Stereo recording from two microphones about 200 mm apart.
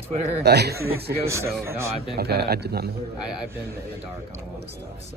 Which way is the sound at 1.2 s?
15° right (ahead or behind).